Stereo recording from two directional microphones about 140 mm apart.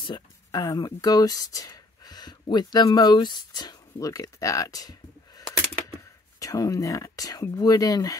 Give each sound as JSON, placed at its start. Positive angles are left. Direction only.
{"t": 0.0, "sound": "speech", "side_deg": 30}